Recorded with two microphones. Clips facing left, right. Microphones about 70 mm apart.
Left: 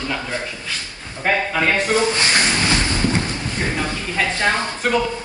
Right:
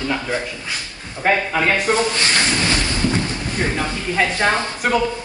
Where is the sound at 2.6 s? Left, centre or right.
Left.